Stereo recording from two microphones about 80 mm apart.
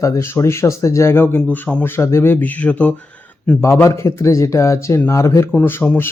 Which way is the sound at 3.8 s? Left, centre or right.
Left.